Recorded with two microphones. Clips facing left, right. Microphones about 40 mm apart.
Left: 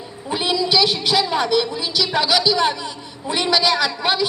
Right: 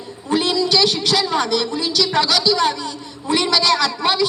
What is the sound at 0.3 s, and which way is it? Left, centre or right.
A woman's voice, centre.